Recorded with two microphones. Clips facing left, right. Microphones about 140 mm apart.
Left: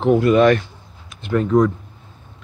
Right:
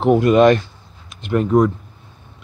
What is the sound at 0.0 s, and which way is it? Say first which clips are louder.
Speech: right 1 dB; 15° right (ahead or behind).